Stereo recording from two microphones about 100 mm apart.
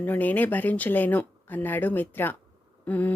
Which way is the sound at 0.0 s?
15° left (ahead or behind).